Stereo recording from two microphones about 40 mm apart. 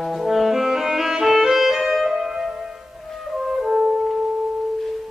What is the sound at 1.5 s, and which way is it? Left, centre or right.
Music, centre.